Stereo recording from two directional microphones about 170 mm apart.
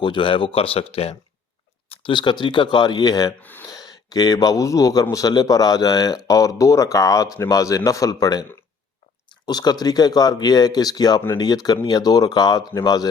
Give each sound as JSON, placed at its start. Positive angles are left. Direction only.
{"t": 0.0, "sound": "a man's voice", "side_deg": 30}
{"t": 3.4, "sound": "speech", "side_deg": 10}
{"t": 3.8, "sound": "a man's voice", "side_deg": 20}
{"t": 9.5, "sound": "a man's voice", "side_deg": 25}